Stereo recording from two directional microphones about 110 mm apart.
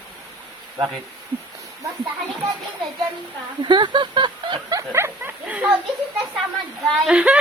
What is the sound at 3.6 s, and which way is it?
Speech, 45° right (ahead or behind).